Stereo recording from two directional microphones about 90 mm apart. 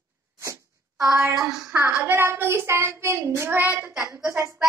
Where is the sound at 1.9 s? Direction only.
25° right (ahead or behind).